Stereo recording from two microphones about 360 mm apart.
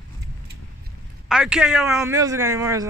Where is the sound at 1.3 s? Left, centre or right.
Centre.